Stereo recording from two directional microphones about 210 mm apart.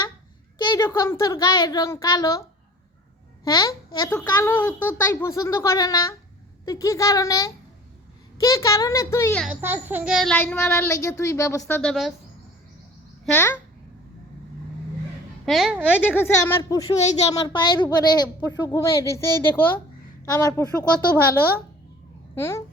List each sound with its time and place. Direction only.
0.6 s a woman's voice: 20° left (ahead or behind)
3.4 s a woman's voice: 20° left (ahead or behind)
9.4 s a woman's voice: 5° right (ahead or behind); by 11.8 s 15° left (ahead or behind)
11.8 s a woman's voice: centre (ahead or behind)
13.2 s a woman's voice: 10° left (ahead or behind)
15.4 s a woman's voice: centre (ahead or behind)
16.0 s a woman's voice: 10° left (ahead or behind)
17.0 s speech: 30° left (ahead or behind)
17.3 s a woman's voice: 20° left (ahead or behind)
22.4 s a woman's voice: 15° left (ahead or behind)